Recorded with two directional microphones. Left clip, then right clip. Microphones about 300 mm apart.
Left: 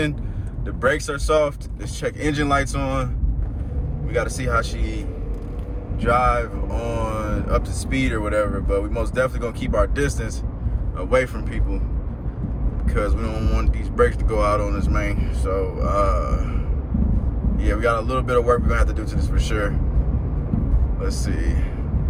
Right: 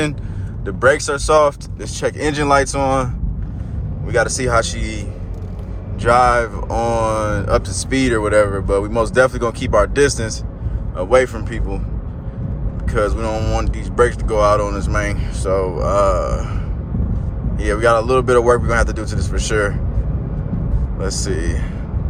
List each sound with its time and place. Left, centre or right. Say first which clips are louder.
0.6 s speech: right 7 dB; centre
4.1 s speech: right 7 dB; centre
6.0 s speech: right 6 dB; centre
12.8 s speech: right 7 dB; centre
17.6 s speech: right 7 dB; centre
21.0 s speech: right 7 dB; centre